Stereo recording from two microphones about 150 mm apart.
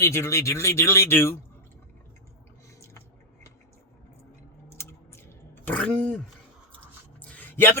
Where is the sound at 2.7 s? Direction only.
20° left (ahead or behind).